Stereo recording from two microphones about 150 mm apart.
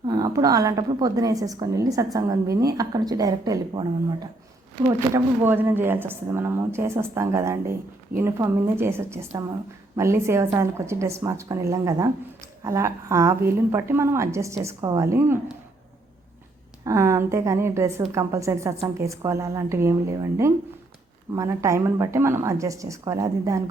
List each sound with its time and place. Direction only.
0.0 s a woman's voice: 25° right (ahead or behind)
16.8 s a woman's voice: 20° right (ahead or behind)
21.3 s a woman's voice: 20° right (ahead or behind)